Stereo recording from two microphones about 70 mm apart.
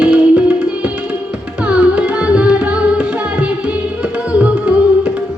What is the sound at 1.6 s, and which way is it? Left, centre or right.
Music, centre.